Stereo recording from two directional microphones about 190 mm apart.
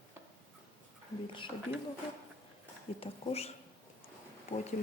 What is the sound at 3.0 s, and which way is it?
Speech, 30° left (ahead or behind).